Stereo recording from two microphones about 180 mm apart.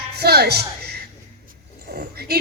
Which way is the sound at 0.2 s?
65° right (ahead or behind).